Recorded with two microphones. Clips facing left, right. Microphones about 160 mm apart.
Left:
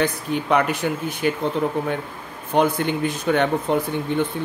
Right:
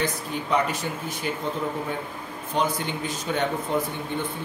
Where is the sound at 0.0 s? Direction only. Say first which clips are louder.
Left 6 dB; 65° left (ahead or behind).